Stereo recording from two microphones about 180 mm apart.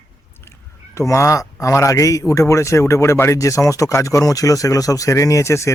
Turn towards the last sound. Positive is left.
turn(degrees=15)  # may be behind; listen again after turning